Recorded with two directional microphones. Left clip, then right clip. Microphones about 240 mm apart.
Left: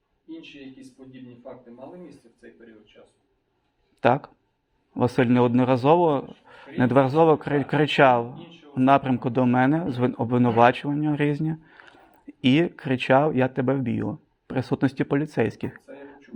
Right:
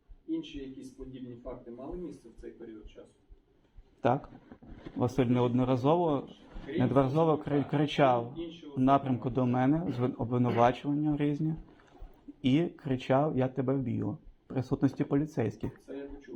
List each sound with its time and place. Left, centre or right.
4.0 s a man's voice: left